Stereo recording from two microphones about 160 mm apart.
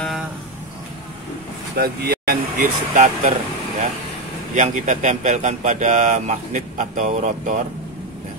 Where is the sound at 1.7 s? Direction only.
70° right (ahead or behind).